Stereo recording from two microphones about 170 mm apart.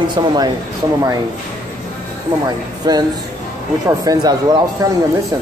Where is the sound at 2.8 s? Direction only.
25° right (ahead or behind).